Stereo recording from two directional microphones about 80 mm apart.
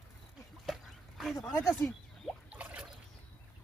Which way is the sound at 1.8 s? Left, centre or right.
Centre.